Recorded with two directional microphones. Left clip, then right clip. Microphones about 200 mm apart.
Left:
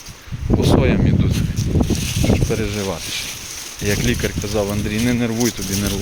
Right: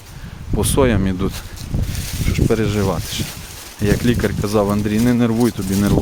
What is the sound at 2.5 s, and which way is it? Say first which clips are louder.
Speech: right 4 dB; 40° right (ahead or behind).